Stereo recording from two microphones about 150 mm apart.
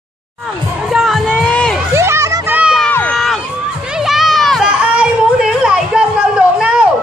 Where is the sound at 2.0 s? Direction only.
20° right (ahead or behind).